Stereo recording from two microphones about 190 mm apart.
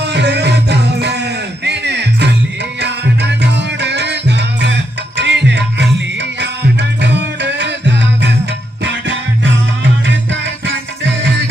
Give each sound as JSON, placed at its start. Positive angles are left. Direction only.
{"t": 0.0, "sound": "music", "side_deg": -65}